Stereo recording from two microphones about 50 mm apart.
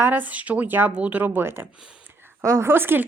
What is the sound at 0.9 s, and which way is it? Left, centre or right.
Speech, right.